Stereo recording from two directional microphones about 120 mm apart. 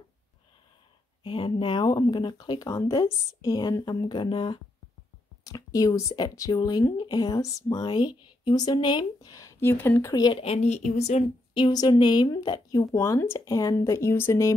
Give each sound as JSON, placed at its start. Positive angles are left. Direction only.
{"t": 1.2, "sound": "speech", "side_deg": 45}
{"t": 5.4, "sound": "speech", "side_deg": 30}
{"t": 10.4, "sound": "speech", "side_deg": 60}
{"t": 11.7, "sound": "speech", "side_deg": 35}
{"t": 12.9, "sound": "speech", "side_deg": 25}